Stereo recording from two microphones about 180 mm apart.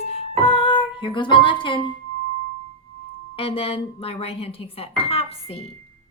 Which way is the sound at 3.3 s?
30° left (ahead or behind).